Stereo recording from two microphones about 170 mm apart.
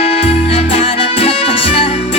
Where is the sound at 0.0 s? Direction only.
35° left (ahead or behind).